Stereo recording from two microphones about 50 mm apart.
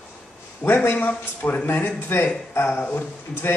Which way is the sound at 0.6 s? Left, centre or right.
Left.